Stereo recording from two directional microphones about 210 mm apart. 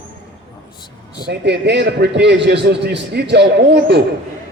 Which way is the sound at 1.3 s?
55° right (ahead or behind).